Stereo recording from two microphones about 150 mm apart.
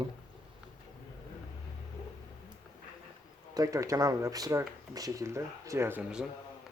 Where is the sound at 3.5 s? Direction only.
25° right (ahead or behind).